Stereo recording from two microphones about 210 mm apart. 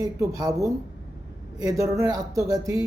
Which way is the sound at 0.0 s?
15° right (ahead or behind).